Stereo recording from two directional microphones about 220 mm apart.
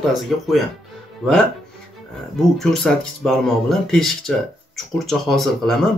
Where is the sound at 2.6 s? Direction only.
Centre (ahead or behind).